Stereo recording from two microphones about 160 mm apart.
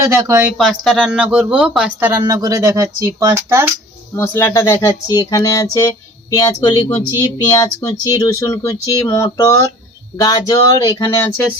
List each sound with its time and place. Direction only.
0.0 s speech: 15° right (ahead or behind)
0.5 s speech: centre (ahead or behind)
4.1 s speech: 15° left (ahead or behind)